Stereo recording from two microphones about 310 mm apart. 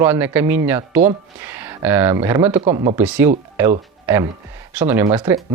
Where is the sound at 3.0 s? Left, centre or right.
Centre.